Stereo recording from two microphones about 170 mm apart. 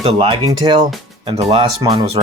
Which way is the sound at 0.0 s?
35° right (ahead or behind).